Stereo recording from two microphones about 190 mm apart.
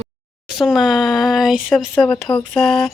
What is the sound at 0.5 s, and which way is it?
Speech, centre (ahead or behind).